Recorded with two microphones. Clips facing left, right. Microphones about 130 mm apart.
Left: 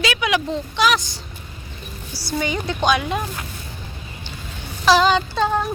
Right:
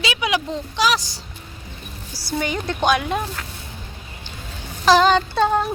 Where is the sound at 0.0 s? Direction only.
30° right (ahead or behind).